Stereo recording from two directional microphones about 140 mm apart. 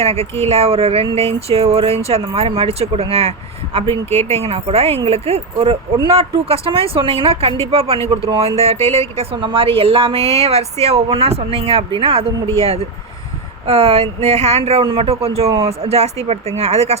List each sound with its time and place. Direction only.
0.0 s speech: 45° right (ahead or behind)